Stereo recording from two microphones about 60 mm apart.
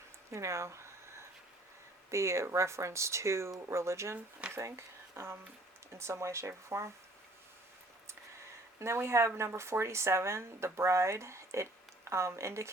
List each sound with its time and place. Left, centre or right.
0.3 s a sound: right
2.0 s speech: right
8.8 s speech: right